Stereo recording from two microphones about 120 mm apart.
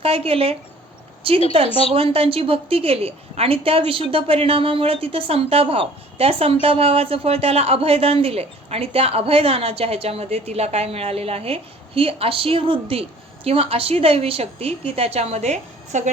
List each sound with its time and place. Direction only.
0.0 s a woman's voice: 55° right (ahead or behind); by 16.1 s 80° right